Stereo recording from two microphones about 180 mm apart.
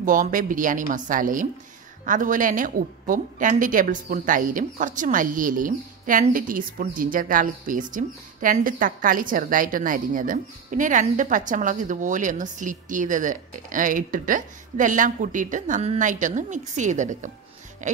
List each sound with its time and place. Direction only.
0.0 s a woman's voice: 50° right (ahead or behind)